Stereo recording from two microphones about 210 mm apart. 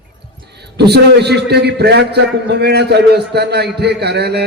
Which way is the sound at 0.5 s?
50° right (ahead or behind).